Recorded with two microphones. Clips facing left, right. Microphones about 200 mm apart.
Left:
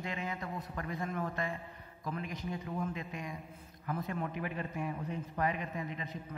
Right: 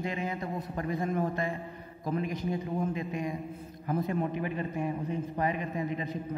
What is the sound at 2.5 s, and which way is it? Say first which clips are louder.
Speech: right 4 dB; 30° right (ahead or behind).